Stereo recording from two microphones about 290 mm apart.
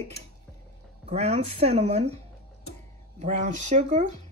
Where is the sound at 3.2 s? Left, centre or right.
Right.